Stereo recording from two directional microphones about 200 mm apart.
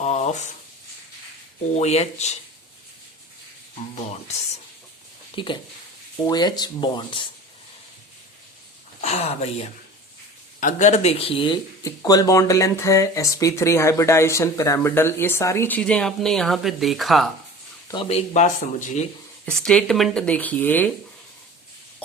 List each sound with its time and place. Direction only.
0.0 s a sound: 35° left (ahead or behind)
1.8 s speech: 35° left (ahead or behind)
5.3 s speech: 25° left (ahead or behind)
9.0 s speech: 35° left (ahead or behind); by 17.2 s centre (ahead or behind)
17.9 s speech: 30° left (ahead or behind)
19.5 s speech: 5° left (ahead or behind)